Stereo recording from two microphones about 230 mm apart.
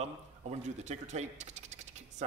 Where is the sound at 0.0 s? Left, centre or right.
Right.